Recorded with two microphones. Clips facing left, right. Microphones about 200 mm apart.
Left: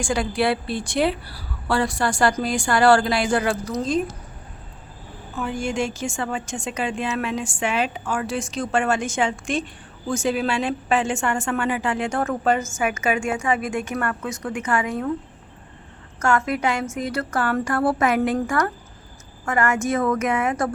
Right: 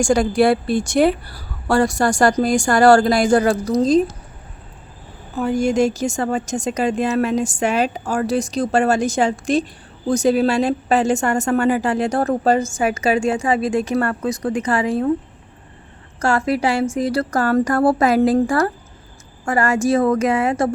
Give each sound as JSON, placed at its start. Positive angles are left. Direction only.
{"t": 0.0, "sound": "a woman's voice", "side_deg": -45}
{"t": 5.3, "sound": "a woman's voice", "side_deg": -40}
{"t": 16.2, "sound": "a woman's voice", "side_deg": -30}